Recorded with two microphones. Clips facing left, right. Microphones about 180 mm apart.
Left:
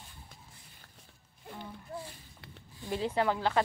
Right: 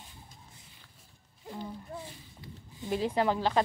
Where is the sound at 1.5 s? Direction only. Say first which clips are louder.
Right 2 dB; 15° right (ahead or behind).